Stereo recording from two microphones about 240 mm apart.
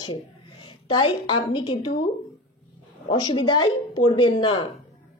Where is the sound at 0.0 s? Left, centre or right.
Centre.